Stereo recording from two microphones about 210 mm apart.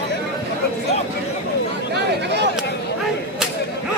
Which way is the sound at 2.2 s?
55° right (ahead or behind).